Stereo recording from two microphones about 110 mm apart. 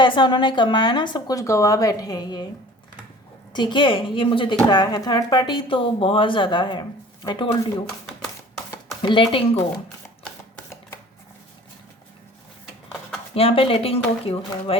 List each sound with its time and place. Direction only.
0.0 s speech: 45° left (ahead or behind)
3.5 s a woman's voice: 45° left (ahead or behind)
4.7 s a woman's voice: 40° left (ahead or behind)
9.0 s speech: 45° left (ahead or behind)
13.3 s speech: 60° left (ahead or behind)